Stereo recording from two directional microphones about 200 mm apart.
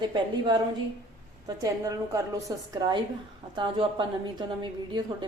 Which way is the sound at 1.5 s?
15° right (ahead or behind).